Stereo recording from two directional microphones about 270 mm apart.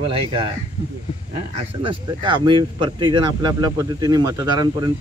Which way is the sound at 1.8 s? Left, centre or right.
Centre.